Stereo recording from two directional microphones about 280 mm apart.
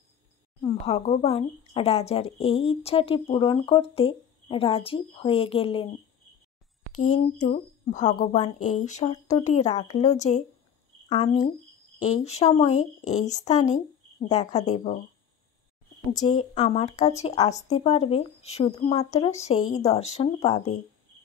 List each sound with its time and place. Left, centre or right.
0.6 s speech: centre
7.0 s speech: left
16.1 s speech: centre